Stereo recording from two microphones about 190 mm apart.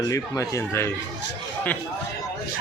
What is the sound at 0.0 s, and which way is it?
Speech, 15° left (ahead or behind).